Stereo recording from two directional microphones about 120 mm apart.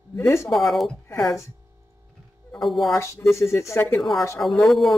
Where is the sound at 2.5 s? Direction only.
Centre (ahead or behind).